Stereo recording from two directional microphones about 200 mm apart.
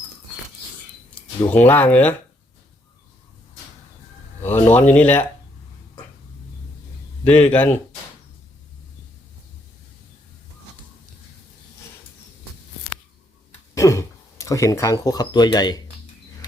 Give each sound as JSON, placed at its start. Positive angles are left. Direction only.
{"t": 1.5, "sound": "speech", "side_deg": 10}
{"t": 4.4, "sound": "speech", "side_deg": 10}
{"t": 7.3, "sound": "speech", "side_deg": 10}
{"t": 13.7, "sound": "speech", "side_deg": 15}